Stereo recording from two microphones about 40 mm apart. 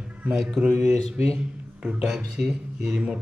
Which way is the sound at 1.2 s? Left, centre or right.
Right.